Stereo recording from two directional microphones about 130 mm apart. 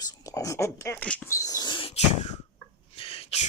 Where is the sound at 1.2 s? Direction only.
25° left (ahead or behind).